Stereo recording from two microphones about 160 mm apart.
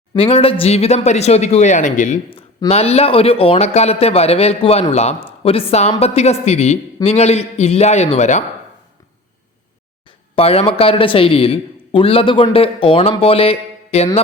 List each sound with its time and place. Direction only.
0.2 s speech: 35° left (ahead or behind)
2.6 s a man's voice: 40° left (ahead or behind)
10.3 s a man's voice: 35° left (ahead or behind)